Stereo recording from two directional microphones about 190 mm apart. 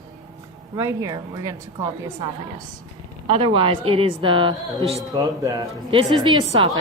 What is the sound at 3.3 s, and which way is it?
A woman's voice, 25° right (ahead or behind).